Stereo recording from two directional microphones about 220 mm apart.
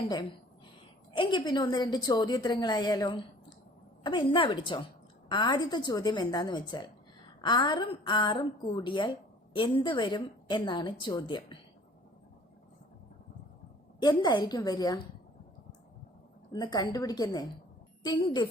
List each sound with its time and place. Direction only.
0.1 s a woman's voice: 20° left (ahead or behind)
14.0 s a woman's voice: 20° left (ahead or behind)
16.5 s a woman's voice: 20° left (ahead or behind)